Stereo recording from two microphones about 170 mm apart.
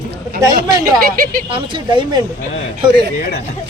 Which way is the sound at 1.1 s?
55° right (ahead or behind).